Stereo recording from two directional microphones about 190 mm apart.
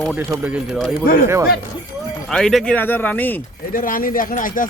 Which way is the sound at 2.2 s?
Centre (ahead or behind).